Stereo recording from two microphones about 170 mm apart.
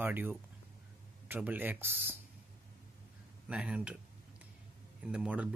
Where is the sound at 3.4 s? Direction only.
5° right (ahead or behind).